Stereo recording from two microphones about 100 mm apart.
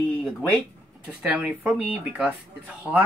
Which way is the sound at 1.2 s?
15° right (ahead or behind).